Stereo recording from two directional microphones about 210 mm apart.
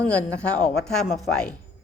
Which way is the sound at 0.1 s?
5° left (ahead or behind).